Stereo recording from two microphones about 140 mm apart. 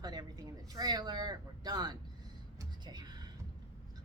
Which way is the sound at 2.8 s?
30° right (ahead or behind).